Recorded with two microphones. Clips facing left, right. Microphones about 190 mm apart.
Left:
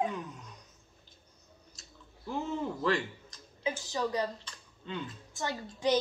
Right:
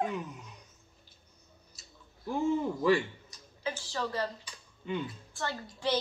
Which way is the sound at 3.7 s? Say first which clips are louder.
Left 2 dB; 15° left (ahead or behind).